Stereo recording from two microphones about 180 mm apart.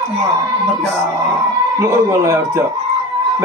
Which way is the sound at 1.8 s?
15° right (ahead or behind).